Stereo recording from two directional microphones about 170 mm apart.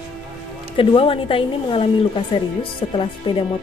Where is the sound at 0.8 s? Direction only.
35° left (ahead or behind).